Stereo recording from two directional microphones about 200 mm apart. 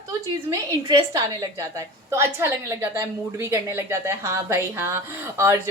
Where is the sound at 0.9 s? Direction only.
20° right (ahead or behind).